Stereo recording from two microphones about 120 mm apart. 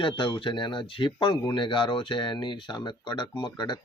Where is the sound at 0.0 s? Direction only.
45° left (ahead or behind).